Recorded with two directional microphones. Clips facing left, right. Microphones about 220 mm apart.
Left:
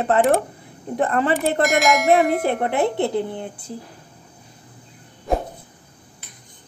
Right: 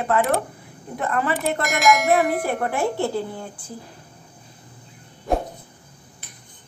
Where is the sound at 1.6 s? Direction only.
Centre (ahead or behind).